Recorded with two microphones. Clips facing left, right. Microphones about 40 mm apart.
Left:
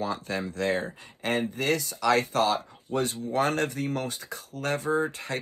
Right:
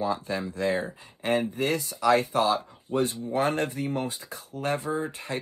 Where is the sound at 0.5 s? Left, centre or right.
Left.